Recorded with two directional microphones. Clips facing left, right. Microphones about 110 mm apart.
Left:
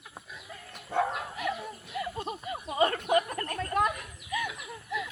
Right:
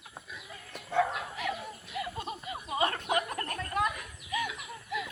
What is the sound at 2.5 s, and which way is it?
Speech, 40° left (ahead or behind).